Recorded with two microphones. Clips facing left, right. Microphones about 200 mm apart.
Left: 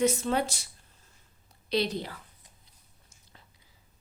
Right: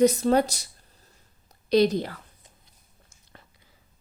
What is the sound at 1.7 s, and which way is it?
Speech, 45° right (ahead or behind).